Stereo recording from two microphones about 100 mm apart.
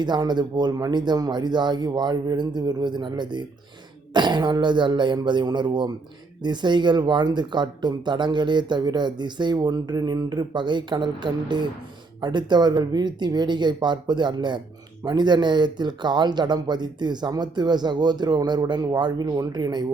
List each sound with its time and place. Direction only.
0.0 s speech: 45° right (ahead or behind)